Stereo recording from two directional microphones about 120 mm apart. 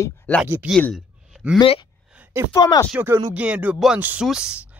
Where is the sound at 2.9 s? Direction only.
20° right (ahead or behind).